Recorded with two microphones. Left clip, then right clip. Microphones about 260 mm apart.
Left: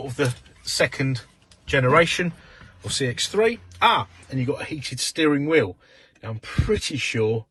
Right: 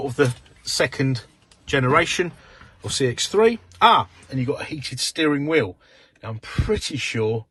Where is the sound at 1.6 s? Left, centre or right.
Centre.